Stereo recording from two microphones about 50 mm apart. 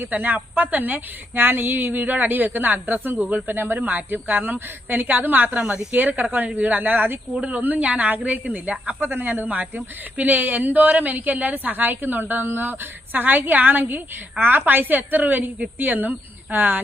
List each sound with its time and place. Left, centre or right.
0.0 s speech: right
9.0 s speech: right